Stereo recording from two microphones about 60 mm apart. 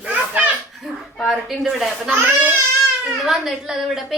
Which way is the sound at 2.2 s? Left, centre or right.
Right.